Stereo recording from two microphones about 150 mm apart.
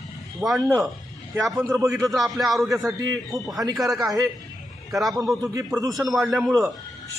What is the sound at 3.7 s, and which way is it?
A man's voice, centre (ahead or behind).